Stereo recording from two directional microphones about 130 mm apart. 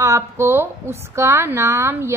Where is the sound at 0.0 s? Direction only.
20° right (ahead or behind).